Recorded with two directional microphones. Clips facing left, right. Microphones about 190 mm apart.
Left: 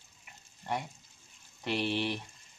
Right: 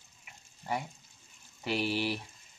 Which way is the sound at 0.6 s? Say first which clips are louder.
Even; 5° right (ahead or behind).